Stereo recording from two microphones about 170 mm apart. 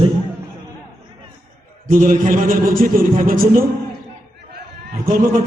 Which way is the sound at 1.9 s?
55° right (ahead or behind).